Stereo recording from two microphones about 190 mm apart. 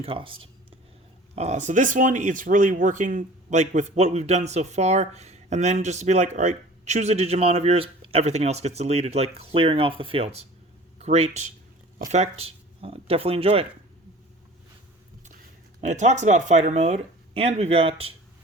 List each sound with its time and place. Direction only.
0.0 s speech: 30° right (ahead or behind)
15.8 s speech: 40° right (ahead or behind)